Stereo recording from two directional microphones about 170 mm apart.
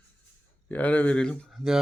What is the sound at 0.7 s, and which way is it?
Speech, 10° left (ahead or behind).